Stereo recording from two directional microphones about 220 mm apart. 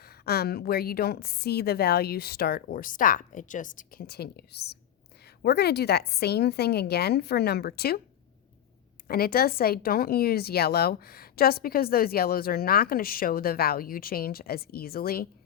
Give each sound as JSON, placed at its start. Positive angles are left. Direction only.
{"t": 0.0, "sound": "speech", "side_deg": 45}
{"t": 9.0, "sound": "speech", "side_deg": 45}